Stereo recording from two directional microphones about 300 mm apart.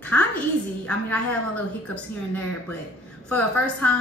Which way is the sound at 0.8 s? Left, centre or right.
Centre.